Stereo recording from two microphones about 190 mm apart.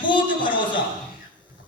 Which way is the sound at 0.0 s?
25° left (ahead or behind).